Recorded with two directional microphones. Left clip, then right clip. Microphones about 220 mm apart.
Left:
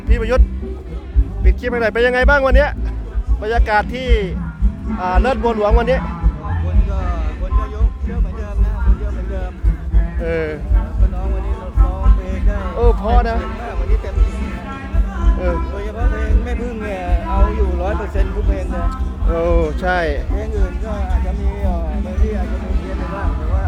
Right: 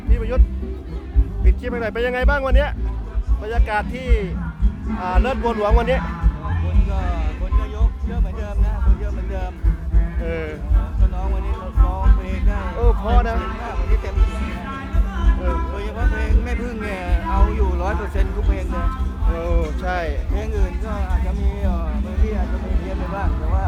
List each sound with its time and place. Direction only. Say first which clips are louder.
0.1 s speech: left 8 dB; 25° left (ahead or behind)
1.5 s a man's voice: left 7 dB; 20° left (ahead or behind); by 7.2 s centre (ahead or behind)
10.2 s speech: left 7 dB; 25° left (ahead or behind)
12.3 s a sound: left 3 dB; 5° right (ahead or behind)
12.8 s speech: left 5 dB; 20° left (ahead or behind)
15.7 s music: left 2 dB; 5° right (ahead or behind)
19.4 s speech: left 9 dB; 30° left (ahead or behind)